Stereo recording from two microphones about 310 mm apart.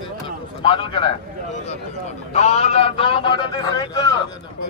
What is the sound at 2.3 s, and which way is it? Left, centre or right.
A man's voice, left.